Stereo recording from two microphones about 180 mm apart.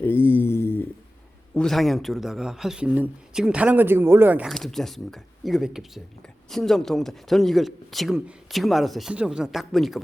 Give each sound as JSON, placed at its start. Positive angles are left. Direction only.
{"t": 0.0, "sound": "mantra", "side_deg": 15}
{"t": 1.5, "sound": "speech", "side_deg": 0}
{"t": 4.5, "sound": "speech", "side_deg": 0}